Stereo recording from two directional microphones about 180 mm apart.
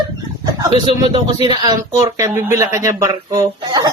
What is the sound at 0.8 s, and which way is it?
Speech, 25° right (ahead or behind).